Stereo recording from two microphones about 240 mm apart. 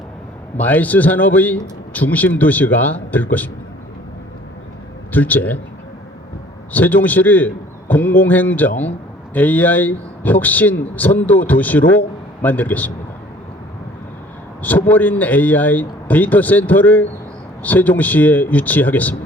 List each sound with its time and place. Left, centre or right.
0.6 s a man's voice: centre
5.1 s a man's voice: centre
6.7 s a man's voice: centre
14.6 s a man's voice: centre